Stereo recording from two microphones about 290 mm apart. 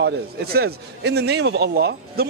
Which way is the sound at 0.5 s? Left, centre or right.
Right.